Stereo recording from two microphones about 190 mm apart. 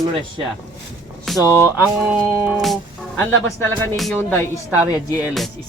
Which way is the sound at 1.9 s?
5° right (ahead or behind).